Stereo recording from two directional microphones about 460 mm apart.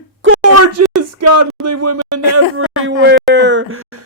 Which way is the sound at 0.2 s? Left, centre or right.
Right.